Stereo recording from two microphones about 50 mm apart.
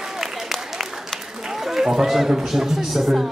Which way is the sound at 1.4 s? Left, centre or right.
Centre.